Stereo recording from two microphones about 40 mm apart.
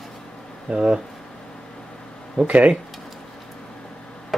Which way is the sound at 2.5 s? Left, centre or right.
Right.